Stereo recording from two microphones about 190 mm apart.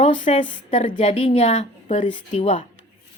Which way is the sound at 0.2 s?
30° left (ahead or behind).